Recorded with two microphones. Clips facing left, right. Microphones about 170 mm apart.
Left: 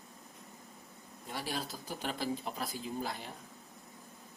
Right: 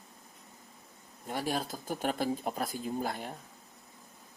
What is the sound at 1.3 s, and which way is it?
Speech, 50° right (ahead or behind).